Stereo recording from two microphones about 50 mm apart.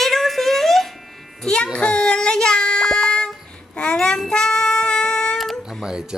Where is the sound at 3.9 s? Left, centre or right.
Centre.